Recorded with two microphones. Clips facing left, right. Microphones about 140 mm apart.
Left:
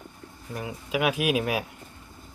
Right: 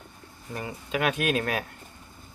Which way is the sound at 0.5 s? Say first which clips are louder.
Left 1 dB; centre (ahead or behind).